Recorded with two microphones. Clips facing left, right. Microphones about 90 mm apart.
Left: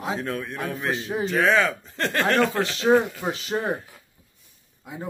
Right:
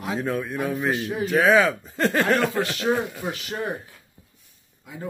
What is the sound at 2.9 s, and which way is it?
Speech, 15° left (ahead or behind).